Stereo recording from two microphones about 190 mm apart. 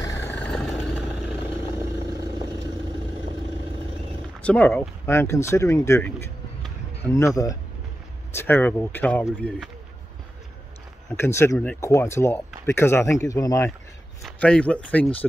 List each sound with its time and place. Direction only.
0.0 s vehicle: 15° left (ahead or behind)
4.4 s speech: 5° left (ahead or behind)
11.1 s speech: 15° left (ahead or behind)
14.2 s speech: 5° left (ahead or behind)